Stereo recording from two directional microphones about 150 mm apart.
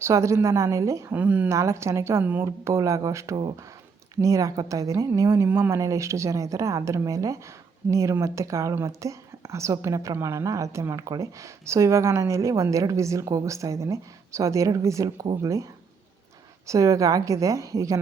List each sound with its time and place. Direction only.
0.0 s speech: 20° right (ahead or behind)
1.2 s speech: 10° right (ahead or behind)
16.6 s speech: 20° right (ahead or behind)